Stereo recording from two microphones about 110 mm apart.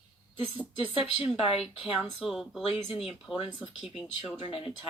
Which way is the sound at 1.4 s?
55° left (ahead or behind).